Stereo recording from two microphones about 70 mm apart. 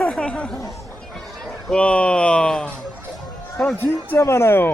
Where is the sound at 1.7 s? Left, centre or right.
Centre.